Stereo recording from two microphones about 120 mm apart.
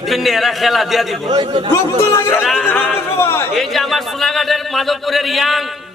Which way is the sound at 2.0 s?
20° left (ahead or behind).